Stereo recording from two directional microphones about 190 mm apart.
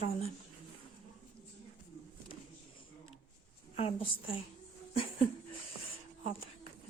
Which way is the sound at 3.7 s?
30° left (ahead or behind).